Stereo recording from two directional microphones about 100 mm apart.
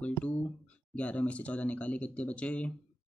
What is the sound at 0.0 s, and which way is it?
Speech, 15° left (ahead or behind).